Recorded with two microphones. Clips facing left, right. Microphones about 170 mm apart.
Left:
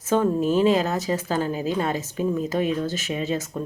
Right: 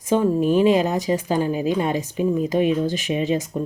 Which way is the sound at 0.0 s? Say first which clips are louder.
Right 2 dB; 15° right (ahead or behind).